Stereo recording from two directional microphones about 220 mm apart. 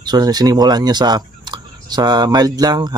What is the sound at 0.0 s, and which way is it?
Speech, 20° right (ahead or behind).